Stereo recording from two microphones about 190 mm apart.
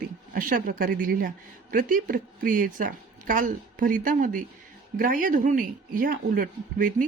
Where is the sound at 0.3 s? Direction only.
45° right (ahead or behind).